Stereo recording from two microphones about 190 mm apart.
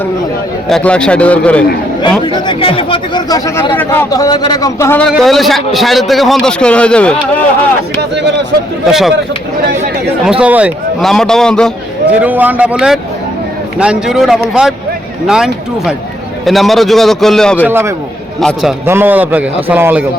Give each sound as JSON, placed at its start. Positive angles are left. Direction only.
{"t": 0.7, "sound": "a man's voice", "side_deg": 5}
{"t": 2.2, "sound": "speech", "side_deg": 25}
{"t": 5.0, "sound": "a man's voice", "side_deg": 0}
{"t": 8.1, "sound": "speech", "side_deg": -65}
{"t": 8.9, "sound": "a man's voice", "side_deg": 0}
{"t": 10.2, "sound": "a man's voice", "side_deg": -5}
{"t": 12.2, "sound": "a man's voice", "side_deg": -10}
{"t": 17.7, "sound": "a man's voice", "side_deg": -10}
{"t": 18.3, "sound": "a man's voice", "side_deg": 0}
{"t": 18.9, "sound": "a man's voice", "side_deg": -10}